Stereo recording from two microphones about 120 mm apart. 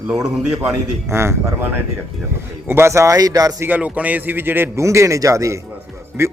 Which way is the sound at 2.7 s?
20° right (ahead or behind).